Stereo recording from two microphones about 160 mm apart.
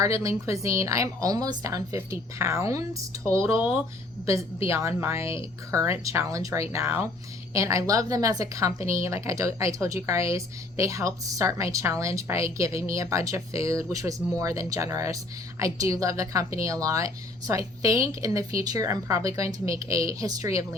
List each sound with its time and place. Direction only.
0.0 s a woman's voice: 20° right (ahead or behind)
5.7 s a woman's voice: 20° right (ahead or behind)